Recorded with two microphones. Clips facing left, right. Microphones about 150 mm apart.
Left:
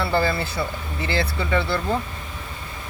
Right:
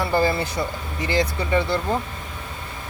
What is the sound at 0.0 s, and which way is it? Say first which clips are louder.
Speech: right 1 dB; 15° right (ahead or behind).